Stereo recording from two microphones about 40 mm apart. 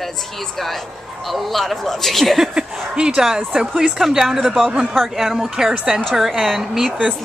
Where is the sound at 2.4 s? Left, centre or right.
Centre.